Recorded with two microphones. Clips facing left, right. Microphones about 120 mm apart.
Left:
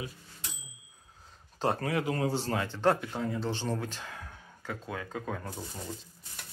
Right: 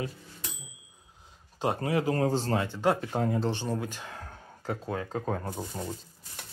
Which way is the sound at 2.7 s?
10° right (ahead or behind).